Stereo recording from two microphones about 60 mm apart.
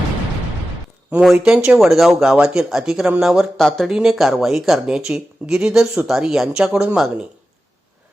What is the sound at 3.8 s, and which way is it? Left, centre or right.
Speech, centre.